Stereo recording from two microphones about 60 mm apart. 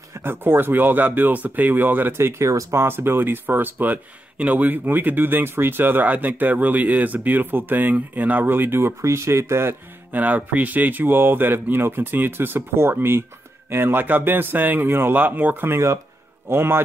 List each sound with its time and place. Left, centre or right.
0.2 s speech: right
10.1 s speech: right